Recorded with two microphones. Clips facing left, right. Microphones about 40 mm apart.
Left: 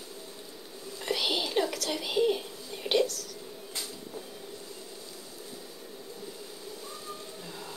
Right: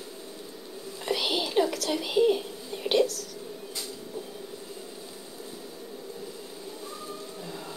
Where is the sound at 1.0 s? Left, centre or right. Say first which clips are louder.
Right 2 dB; centre.